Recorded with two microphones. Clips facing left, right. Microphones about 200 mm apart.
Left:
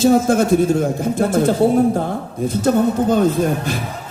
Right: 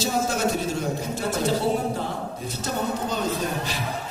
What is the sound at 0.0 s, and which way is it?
A man's voice, 50° left (ahead or behind).